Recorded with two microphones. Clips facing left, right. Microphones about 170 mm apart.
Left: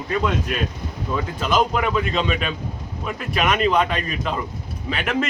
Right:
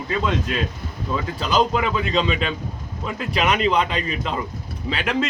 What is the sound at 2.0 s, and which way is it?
Speech, 25° right (ahead or behind).